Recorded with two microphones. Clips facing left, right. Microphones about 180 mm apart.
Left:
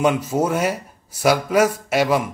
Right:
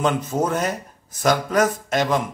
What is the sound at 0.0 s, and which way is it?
Speech, 10° left (ahead or behind).